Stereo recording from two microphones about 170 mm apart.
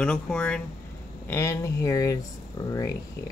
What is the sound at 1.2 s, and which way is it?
Speech, 15° left (ahead or behind).